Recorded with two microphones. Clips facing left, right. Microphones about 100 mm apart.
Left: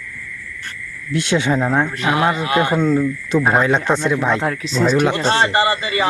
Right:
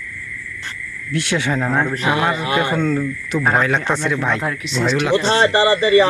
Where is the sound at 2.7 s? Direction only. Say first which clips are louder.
Left 3 dB; 15° left (ahead or behind).